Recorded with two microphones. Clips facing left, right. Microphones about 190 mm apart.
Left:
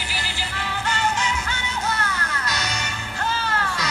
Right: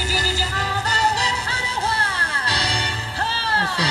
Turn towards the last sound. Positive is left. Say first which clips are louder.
# right 2 dB
turn(degrees=-30)  # may be behind; listen again after turning